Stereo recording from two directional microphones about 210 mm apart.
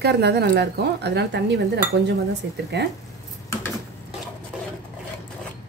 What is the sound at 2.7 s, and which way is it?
Speech, 55° right (ahead or behind).